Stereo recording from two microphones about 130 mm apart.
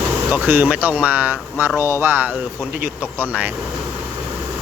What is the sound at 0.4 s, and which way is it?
Speech, 15° right (ahead or behind).